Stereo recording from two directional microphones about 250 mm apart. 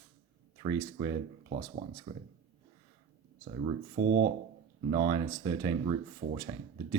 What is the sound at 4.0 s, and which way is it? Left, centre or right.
Speech, right.